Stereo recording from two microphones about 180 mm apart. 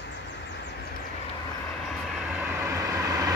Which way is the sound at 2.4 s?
15° right (ahead or behind).